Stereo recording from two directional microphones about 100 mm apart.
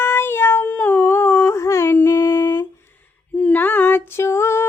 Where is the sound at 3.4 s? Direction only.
15° left (ahead or behind).